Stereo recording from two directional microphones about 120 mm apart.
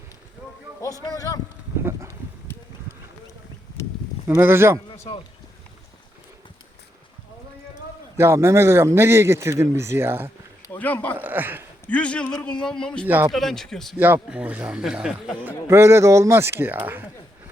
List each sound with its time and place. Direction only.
0.8 s speech: 30° left (ahead or behind)
1.8 s a sound: 25° right (ahead or behind)
4.4 s a man's voice: 20° right (ahead or behind)
4.9 s a sound: 45° left (ahead or behind)
8.1 s a man's voice: 20° right (ahead or behind)
10.7 s a man's voice: 15° left (ahead or behind)
11.2 s speech: 15° right (ahead or behind)
11.9 s a man's voice: 10° left (ahead or behind)
13.1 s speech: 15° right (ahead or behind)
13.3 s speech: centre (ahead or behind)
14.0 s speech: 10° right (ahead or behind)
15.4 s a man's voice: 20° right (ahead or behind)